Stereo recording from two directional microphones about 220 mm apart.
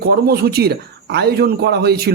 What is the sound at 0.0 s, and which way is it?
Speech, 45° right (ahead or behind).